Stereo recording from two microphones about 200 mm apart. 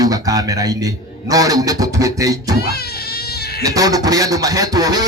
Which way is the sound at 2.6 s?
50° left (ahead or behind).